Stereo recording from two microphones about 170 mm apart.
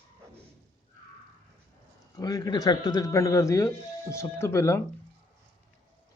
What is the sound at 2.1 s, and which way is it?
A man's voice, 20° left (ahead or behind).